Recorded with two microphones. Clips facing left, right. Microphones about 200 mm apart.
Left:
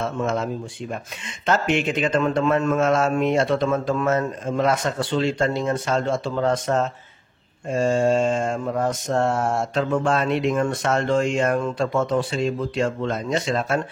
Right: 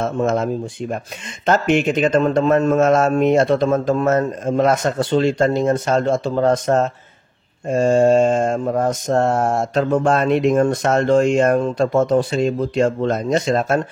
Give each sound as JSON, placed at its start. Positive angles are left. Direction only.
{"t": 0.0, "sound": "mantra", "side_deg": -45}